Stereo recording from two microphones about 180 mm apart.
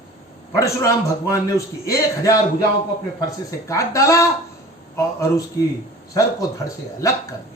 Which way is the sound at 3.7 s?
15° left (ahead or behind).